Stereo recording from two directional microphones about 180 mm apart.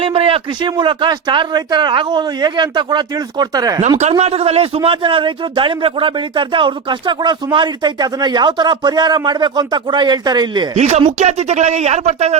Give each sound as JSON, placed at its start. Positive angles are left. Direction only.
{"t": 0.0, "sound": "speech", "side_deg": -30}
{"t": 3.8, "sound": "speech", "side_deg": -40}
{"t": 10.8, "sound": "speech", "side_deg": -40}